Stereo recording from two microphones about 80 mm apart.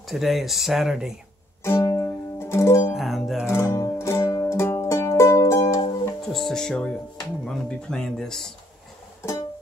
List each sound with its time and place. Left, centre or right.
0.1 s speech: centre
1.6 s music: left
2.9 s music: centre
3.4 s music: left
6.3 s speech: centre